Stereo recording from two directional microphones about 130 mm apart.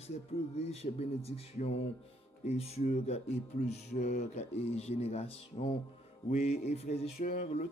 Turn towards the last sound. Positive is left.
turn(degrees=60)  # may be behind; listen again after turning